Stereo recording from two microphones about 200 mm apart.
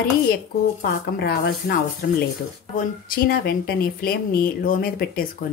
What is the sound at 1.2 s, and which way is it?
Speech, 55° left (ahead or behind).